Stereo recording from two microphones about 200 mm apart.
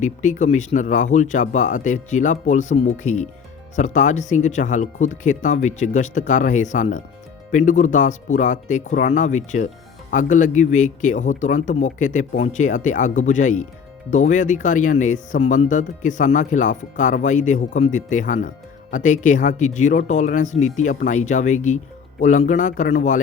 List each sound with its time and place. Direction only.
0.0 s speech: 40° left (ahead or behind)